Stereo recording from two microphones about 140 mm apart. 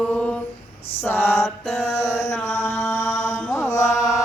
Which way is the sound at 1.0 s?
15° left (ahead or behind).